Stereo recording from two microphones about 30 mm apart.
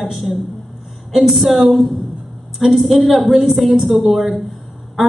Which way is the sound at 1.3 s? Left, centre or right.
Centre.